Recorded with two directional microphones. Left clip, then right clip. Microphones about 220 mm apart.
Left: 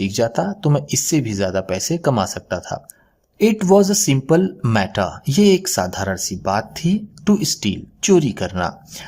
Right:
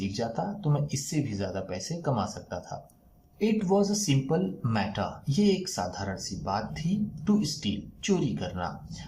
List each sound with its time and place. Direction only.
0.0 s speech: 50° left (ahead or behind)